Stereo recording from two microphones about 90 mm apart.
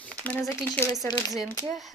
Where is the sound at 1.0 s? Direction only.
45° left (ahead or behind).